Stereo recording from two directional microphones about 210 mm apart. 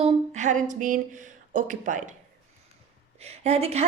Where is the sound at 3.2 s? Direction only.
30° right (ahead or behind).